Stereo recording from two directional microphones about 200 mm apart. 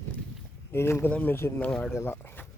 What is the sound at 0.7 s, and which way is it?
Speech, 10° left (ahead or behind).